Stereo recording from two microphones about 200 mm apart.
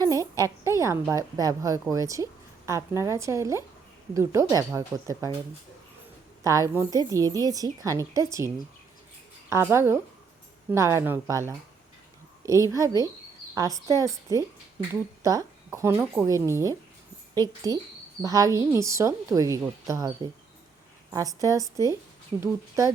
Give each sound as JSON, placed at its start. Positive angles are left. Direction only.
{"t": 0.0, "sound": "a woman's voice", "side_deg": -15}
{"t": 6.4, "sound": "a woman's voice", "side_deg": -15}
{"t": 12.7, "sound": "a woman's voice", "side_deg": -15}